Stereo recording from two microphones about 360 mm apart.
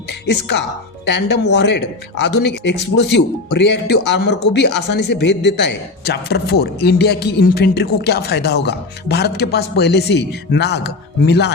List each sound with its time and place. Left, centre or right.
0.1 s speech: left